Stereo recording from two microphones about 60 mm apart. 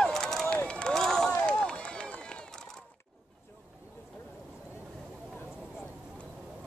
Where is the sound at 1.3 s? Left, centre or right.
Centre.